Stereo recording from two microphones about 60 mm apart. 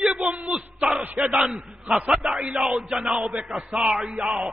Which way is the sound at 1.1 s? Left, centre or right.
Centre.